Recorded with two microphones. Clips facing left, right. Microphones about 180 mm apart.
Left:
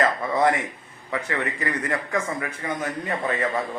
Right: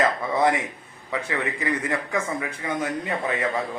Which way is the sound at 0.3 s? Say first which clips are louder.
Left 1 dB; 20° right (ahead or behind).